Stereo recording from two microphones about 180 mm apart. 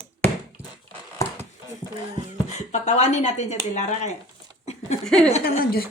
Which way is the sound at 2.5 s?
40° left (ahead or behind).